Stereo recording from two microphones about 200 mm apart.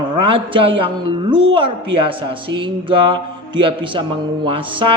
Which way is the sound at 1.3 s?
25° right (ahead or behind).